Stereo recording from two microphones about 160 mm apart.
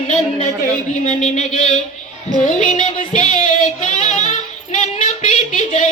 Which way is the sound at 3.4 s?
45° left (ahead or behind).